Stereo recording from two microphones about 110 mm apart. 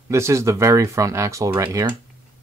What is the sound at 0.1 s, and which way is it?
Speech, 25° right (ahead or behind).